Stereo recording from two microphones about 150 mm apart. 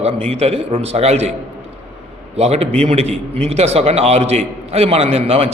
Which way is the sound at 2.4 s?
45° right (ahead or behind).